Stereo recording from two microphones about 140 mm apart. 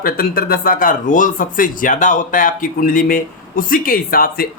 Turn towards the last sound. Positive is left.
turn(degrees=90)